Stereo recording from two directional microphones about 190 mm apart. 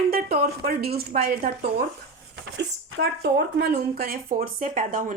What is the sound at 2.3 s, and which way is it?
A woman's voice, 70° right (ahead or behind).